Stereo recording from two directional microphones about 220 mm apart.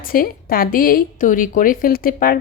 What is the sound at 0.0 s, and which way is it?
Speech, 40° left (ahead or behind).